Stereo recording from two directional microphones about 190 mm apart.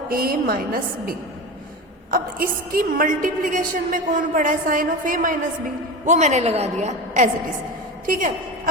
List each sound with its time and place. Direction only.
0.1 s a woman's voice: 50° right (ahead or behind)